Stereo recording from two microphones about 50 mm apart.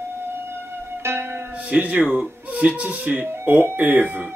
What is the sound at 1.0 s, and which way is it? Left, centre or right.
Music, right.